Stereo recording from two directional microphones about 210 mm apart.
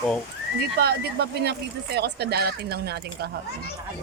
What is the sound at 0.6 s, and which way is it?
Speech, 50° right (ahead or behind).